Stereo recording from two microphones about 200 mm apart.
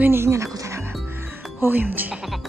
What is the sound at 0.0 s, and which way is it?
Music, 10° right (ahead or behind).